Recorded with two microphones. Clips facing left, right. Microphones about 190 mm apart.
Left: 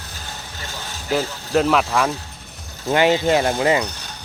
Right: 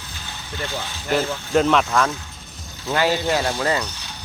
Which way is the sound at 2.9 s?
20° left (ahead or behind).